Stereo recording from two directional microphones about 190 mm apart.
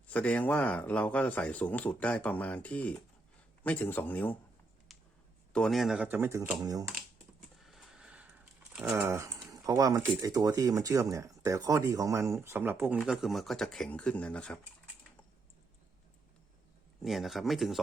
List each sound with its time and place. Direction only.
0.1 s speech: 5° left (ahead or behind)
4.9 s a sound: centre (ahead or behind)
5.5 s speech: centre (ahead or behind); by 6.8 s 20° right (ahead or behind)
7.6 s a sound: centre (ahead or behind); by 10.0 s 20° right (ahead or behind)
10.2 s speech: 20° right (ahead or behind); by 14.6 s 5° left (ahead or behind)
17.0 s speech: centre (ahead or behind)